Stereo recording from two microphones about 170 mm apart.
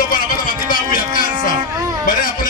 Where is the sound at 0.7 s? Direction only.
55° left (ahead or behind).